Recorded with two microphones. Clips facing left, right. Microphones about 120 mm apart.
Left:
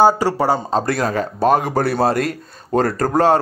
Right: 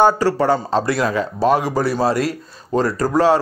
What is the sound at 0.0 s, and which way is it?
Speech, 15° left (ahead or behind).